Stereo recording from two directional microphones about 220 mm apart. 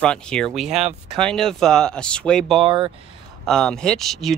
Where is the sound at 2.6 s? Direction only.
20° right (ahead or behind).